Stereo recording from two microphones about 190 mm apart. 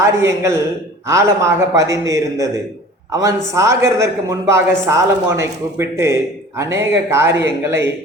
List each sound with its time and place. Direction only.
0.0 s a man's voice: 15° right (ahead or behind)